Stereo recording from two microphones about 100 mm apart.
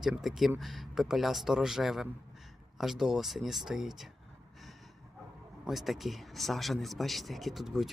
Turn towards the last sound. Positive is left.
turn(degrees=-5)  # may be behind; listen again after turning